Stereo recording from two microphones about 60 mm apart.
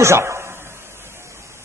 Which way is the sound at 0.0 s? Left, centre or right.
Right.